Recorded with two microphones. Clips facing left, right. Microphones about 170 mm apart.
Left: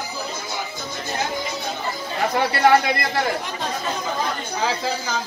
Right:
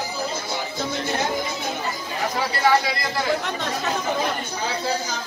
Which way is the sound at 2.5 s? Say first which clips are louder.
Left 3 dB; 55° left (ahead or behind).